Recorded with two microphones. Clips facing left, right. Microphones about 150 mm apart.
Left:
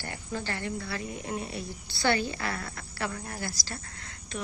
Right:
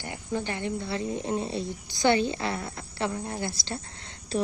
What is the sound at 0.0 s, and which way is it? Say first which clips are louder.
A woman's voice: right 4 dB; 20° right (ahead or behind).